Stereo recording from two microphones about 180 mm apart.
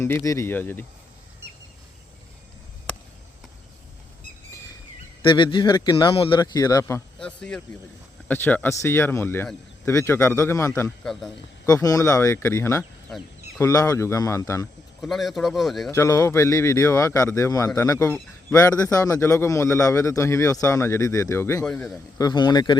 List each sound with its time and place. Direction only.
0.0 s a man's voice: 15° left (ahead or behind)
5.2 s a man's voice: 25° left (ahead or behind)
11.0 s a man's voice: centre (ahead or behind)
11.6 s a man's voice: 20° left (ahead or behind)
15.0 s a man's voice: centre (ahead or behind)
15.9 s a man's voice: 15° left (ahead or behind)
22.2 s a man's voice: 25° left (ahead or behind)